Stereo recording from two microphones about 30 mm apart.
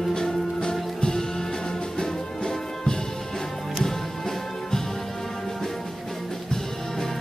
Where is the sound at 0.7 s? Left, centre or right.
Left.